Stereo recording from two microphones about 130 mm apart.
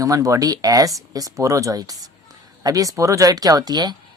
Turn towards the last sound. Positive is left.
turn(degrees=-30)  # may be behind; listen again after turning